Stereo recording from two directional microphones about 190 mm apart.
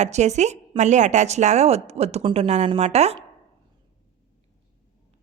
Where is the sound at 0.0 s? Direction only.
35° right (ahead or behind).